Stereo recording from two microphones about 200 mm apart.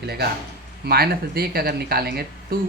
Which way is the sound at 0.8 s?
50° right (ahead or behind).